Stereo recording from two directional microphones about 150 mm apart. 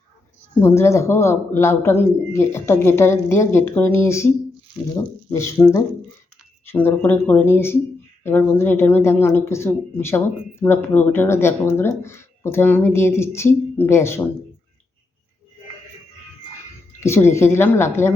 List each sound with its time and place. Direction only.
0.6 s a man's voice: 15° left (ahead or behind)
17.0 s a man's voice: 15° left (ahead or behind)